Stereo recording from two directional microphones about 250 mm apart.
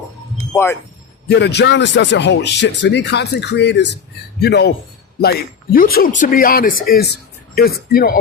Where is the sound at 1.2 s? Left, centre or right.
Left.